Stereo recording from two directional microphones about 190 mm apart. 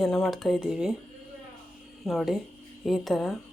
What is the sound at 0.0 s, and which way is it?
Speech, centre (ahead or behind).